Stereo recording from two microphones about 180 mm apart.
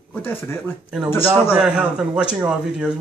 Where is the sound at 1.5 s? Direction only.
5° right (ahead or behind).